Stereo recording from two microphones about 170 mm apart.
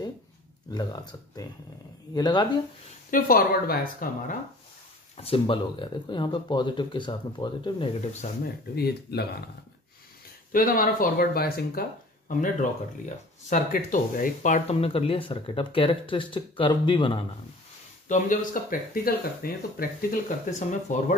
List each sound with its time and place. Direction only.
0.7 s speech: 25° left (ahead or behind)
3.1 s speech: 55° left (ahead or behind)
5.1 s speech: 35° left (ahead or behind)
8.7 s speech: 70° left (ahead or behind)
10.5 s speech: 55° left (ahead or behind); by 17.2 s 30° left (ahead or behind)
18.0 s speech: 50° left (ahead or behind)